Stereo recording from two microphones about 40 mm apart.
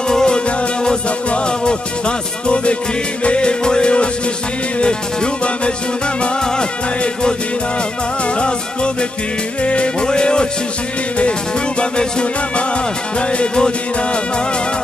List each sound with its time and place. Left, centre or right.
0.1 s music: centre
8.4 s music: left
11.8 s music: left